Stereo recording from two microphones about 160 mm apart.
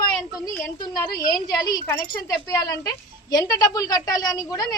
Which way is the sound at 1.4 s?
25° left (ahead or behind).